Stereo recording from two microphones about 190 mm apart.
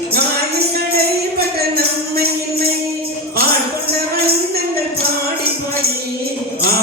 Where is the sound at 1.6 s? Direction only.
55° right (ahead or behind).